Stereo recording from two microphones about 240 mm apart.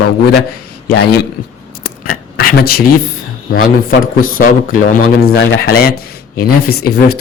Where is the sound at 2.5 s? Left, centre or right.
Left.